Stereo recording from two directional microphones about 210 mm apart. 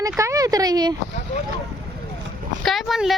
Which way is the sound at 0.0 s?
15° right (ahead or behind).